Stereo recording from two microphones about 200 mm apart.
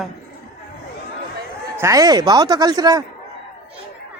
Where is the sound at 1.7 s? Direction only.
15° right (ahead or behind).